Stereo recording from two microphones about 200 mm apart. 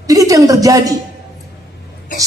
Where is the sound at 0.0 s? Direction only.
15° right (ahead or behind).